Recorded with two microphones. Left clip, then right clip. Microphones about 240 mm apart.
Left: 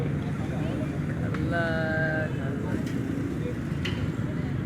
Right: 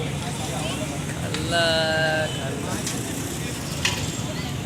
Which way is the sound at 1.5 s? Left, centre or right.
Right.